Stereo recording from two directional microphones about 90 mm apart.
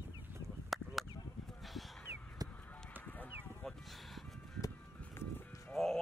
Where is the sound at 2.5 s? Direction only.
15° left (ahead or behind).